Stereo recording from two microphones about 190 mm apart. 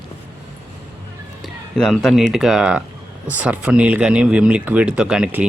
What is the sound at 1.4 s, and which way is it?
Speech, centre (ahead or behind).